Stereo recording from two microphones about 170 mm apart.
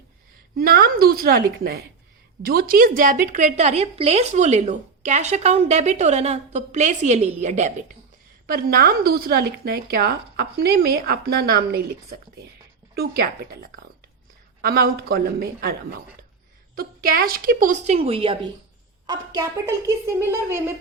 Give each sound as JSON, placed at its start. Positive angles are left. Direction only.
{"t": 0.5, "sound": "a woman's voice", "side_deg": -60}
{"t": 8.4, "sound": "a woman's voice", "side_deg": -60}
{"t": 13.0, "sound": "a woman's voice", "side_deg": -60}
{"t": 16.7, "sound": "a woman's voice", "side_deg": -60}
{"t": 19.0, "sound": "a woman's voice", "side_deg": -20}